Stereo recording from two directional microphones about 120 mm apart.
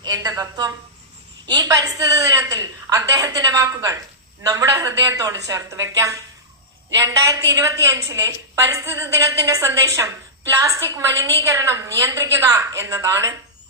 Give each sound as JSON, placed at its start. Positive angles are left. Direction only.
{"t": 0.0, "sound": "a woman's voice", "side_deg": -35}